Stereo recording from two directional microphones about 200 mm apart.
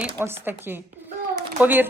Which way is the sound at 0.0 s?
10° right (ahead or behind).